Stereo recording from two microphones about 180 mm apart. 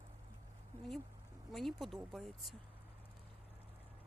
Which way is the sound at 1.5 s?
Centre (ahead or behind).